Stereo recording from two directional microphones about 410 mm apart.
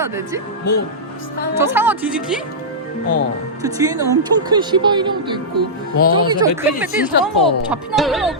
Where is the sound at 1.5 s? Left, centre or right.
Centre.